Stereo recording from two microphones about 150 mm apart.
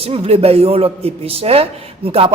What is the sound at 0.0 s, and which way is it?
A woman's voice, 40° right (ahead or behind).